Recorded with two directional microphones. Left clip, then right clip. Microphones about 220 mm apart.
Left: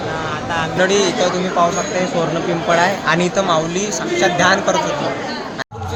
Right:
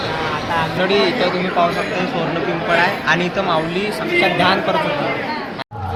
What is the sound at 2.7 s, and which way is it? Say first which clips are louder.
Speech: left 1 dB; 35° left (ahead or behind).